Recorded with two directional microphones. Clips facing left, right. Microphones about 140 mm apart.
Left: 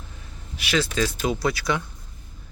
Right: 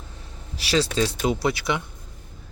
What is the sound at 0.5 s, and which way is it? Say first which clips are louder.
Speech: right 2 dB; 35° right (ahead or behind).